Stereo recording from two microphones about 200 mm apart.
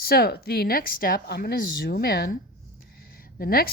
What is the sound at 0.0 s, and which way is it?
Speech, 50° left (ahead or behind).